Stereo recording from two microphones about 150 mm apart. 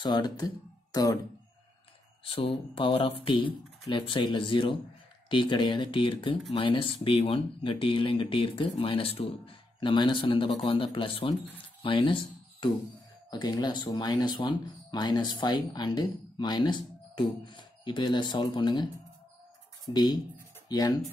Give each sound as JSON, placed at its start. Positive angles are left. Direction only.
{"t": 0.0, "sound": "speech", "side_deg": 30}
{"t": 2.2, "sound": "speech", "side_deg": 40}
{"t": 19.9, "sound": "speech", "side_deg": 30}